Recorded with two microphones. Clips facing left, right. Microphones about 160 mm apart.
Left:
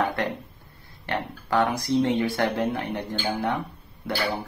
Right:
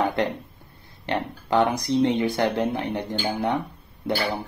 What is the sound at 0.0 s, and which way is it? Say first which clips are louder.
Speech: right 2 dB; 20° right (ahead or behind).